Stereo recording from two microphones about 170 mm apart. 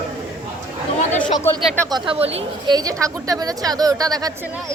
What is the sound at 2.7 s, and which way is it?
A woman's voice, 20° right (ahead or behind).